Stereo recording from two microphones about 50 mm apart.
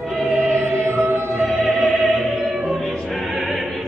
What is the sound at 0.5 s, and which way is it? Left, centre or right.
Music, right.